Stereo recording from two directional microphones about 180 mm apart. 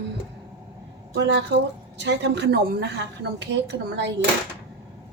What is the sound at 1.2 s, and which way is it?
A woman's voice, 75° right (ahead or behind).